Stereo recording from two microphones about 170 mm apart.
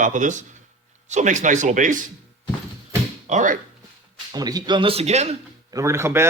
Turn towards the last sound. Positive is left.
turn(degrees=-15)  # may be behind; listen again after turning